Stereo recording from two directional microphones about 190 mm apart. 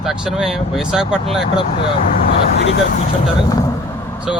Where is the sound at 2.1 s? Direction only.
50° left (ahead or behind).